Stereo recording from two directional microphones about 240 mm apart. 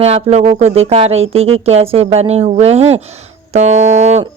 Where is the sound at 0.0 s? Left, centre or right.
Right.